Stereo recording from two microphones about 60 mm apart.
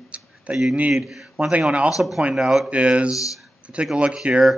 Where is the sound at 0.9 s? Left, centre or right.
Centre.